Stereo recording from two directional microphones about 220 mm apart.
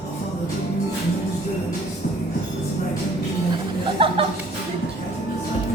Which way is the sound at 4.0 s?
25° right (ahead or behind).